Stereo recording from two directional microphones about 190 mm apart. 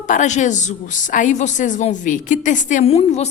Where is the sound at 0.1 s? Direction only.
40° left (ahead or behind).